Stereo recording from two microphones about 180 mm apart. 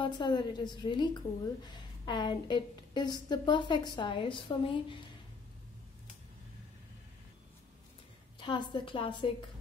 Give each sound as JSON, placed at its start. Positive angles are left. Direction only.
{"t": 0.0, "sound": "a woman's voice", "side_deg": 25}
{"t": 8.4, "sound": "a woman's voice", "side_deg": 25}